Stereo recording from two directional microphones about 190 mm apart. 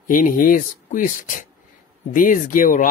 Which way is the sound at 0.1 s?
45° left (ahead or behind).